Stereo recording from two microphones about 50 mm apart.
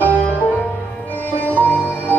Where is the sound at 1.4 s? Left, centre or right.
Left.